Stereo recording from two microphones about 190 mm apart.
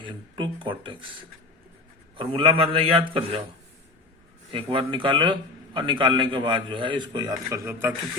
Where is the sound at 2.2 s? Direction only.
30° right (ahead or behind).